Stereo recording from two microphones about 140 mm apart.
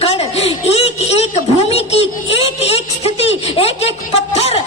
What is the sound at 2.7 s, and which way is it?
A man's voice, 50° left (ahead or behind).